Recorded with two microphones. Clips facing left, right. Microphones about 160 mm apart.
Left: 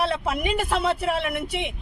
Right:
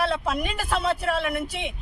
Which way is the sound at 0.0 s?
25° left (ahead or behind).